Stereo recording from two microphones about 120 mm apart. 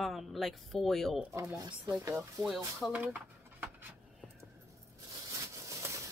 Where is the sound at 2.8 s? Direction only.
10° right (ahead or behind).